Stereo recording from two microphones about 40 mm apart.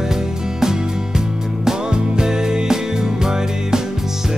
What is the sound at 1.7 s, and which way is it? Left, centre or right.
Music, centre.